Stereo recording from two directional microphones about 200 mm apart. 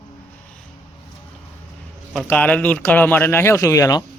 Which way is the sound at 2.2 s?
10° left (ahead or behind).